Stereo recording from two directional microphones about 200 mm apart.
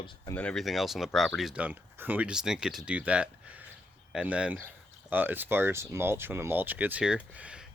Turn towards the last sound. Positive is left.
turn(degrees=-5)  # may be behind; listen again after turning